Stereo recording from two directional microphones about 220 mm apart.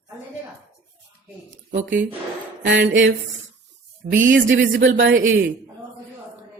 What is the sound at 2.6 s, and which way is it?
Speech, 50° right (ahead or behind).